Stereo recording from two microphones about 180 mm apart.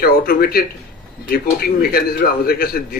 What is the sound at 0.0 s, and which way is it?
Speech, 55° left (ahead or behind).